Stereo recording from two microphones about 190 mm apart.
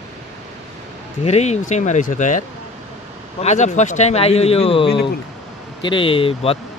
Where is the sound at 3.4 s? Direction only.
40° left (ahead or behind).